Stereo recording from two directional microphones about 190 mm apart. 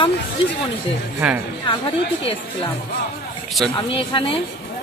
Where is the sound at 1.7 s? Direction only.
25° left (ahead or behind).